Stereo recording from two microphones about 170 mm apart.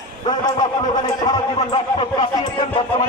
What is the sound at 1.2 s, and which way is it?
Speech, 25° left (ahead or behind).